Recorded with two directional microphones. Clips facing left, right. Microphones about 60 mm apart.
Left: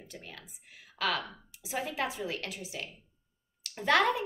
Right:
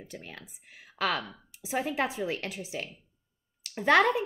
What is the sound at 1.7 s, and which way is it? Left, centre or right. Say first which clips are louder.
A woman's voice: right 4 dB; right.